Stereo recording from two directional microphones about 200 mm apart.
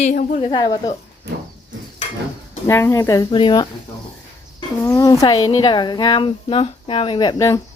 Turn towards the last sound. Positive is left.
turn(degrees=15)  # may be behind; listen again after turning